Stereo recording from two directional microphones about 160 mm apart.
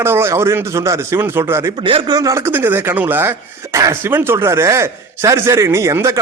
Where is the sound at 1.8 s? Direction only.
30° right (ahead or behind).